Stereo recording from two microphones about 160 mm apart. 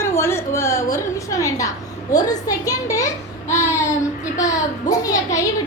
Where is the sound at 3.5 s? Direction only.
20° left (ahead or behind).